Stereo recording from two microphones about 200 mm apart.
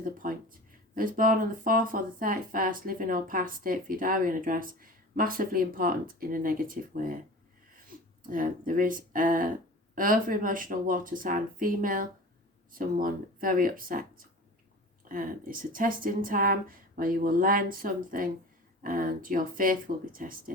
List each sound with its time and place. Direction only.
0.0 s speech: 45° right (ahead or behind)
8.3 s speech: 45° right (ahead or behind)